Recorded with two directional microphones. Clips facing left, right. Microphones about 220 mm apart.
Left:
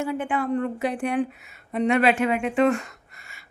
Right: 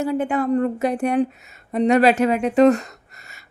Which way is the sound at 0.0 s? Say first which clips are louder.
Right 5 dB; 40° right (ahead or behind).